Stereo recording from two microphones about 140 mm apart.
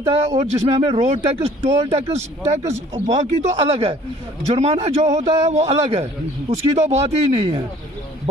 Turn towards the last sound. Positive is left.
turn(degrees=-45)  # may be behind; listen again after turning